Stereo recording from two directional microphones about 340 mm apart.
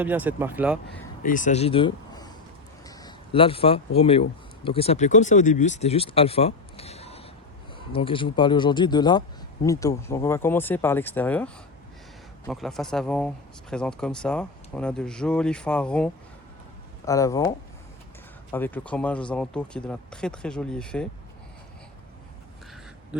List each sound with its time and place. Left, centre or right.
0.0 s speech: centre
0.9 s a man's voice: left; by 16.0 s centre
17.1 s speech: centre
18.5 s speech: centre